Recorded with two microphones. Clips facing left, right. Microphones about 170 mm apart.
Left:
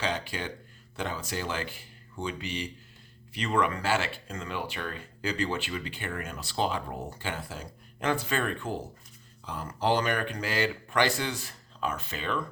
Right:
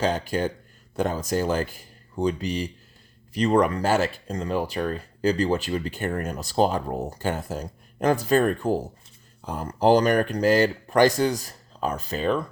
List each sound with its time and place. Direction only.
0.0 s speech: 45° right (ahead or behind)